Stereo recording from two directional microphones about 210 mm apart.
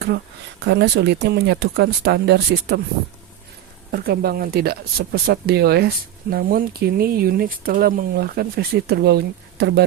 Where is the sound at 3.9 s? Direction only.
45° right (ahead or behind).